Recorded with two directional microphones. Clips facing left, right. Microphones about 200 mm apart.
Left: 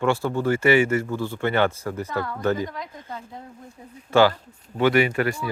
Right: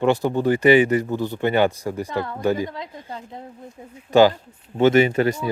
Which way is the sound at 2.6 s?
25° right (ahead or behind).